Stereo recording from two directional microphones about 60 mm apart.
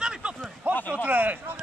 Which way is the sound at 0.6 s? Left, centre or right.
Right.